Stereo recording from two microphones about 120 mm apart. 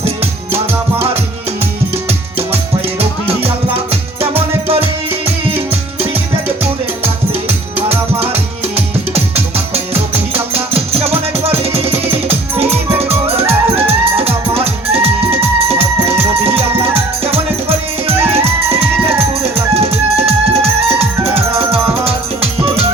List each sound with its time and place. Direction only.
3.0 s music: 55° right (ahead or behind)
7.0 s music: 55° right (ahead or behind)
18.1 s music: 20° right (ahead or behind)
18.7 s music: 55° right (ahead or behind)